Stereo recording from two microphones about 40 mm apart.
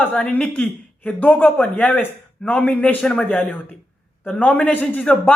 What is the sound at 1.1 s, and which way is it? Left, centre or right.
Speech, left.